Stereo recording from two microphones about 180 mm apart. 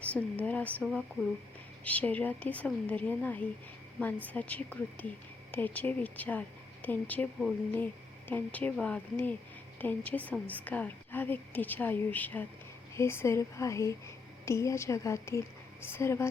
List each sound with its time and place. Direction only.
0.0 s a woman's voice: 10° left (ahead or behind)